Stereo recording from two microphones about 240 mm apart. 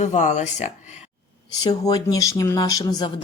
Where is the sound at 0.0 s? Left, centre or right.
Left.